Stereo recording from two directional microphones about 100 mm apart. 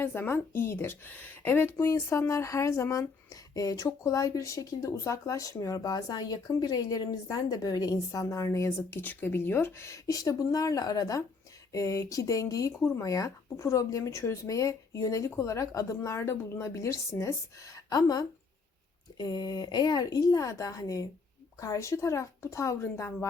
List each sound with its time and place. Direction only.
0.0 s a woman's voice: 20° left (ahead or behind)
8.9 s a woman's voice: 20° left (ahead or behind)